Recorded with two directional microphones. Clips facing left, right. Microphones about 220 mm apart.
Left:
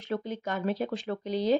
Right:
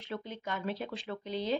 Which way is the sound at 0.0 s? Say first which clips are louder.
Left 7 dB; 45° left (ahead or behind).